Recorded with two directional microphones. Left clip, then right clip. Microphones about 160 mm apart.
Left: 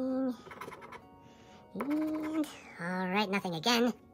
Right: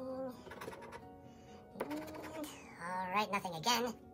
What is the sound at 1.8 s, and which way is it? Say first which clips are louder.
Speech: left 9 dB; 25° left (ahead or behind).